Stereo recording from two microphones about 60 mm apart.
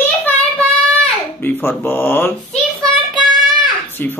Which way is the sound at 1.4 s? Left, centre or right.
Left.